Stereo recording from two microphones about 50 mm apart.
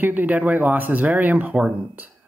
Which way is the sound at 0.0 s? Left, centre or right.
Right.